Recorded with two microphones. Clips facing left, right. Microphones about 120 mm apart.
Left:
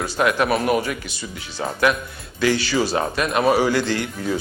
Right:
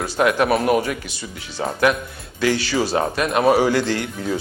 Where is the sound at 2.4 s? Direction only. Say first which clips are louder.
Even; 45° right (ahead or behind).